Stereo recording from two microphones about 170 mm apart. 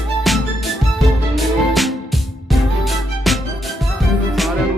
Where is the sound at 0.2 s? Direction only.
Centre (ahead or behind).